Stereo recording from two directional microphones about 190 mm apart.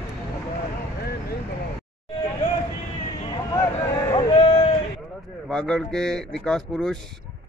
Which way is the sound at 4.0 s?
30° left (ahead or behind).